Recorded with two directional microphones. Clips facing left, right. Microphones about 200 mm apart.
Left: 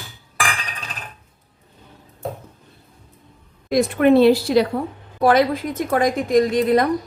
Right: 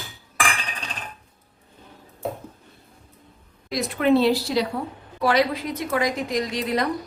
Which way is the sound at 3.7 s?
55° left (ahead or behind).